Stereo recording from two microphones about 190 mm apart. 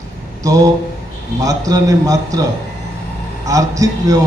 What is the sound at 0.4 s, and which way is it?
A man's voice, 20° right (ahead or behind).